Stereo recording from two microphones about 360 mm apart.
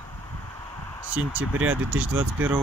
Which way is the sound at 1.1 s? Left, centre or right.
Centre.